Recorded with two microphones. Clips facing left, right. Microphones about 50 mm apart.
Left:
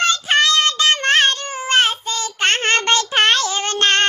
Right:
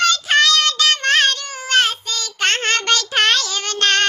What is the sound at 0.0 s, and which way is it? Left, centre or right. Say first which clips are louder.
Child singing: right 1 dB; left.